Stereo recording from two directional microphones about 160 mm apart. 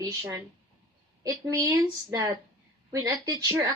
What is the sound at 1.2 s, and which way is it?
Speech, 20° right (ahead or behind).